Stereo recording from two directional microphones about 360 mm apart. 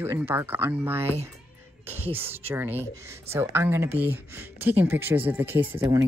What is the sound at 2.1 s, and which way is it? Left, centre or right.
Speech, centre.